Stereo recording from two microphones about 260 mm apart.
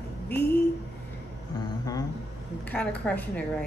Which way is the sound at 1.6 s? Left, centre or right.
Centre.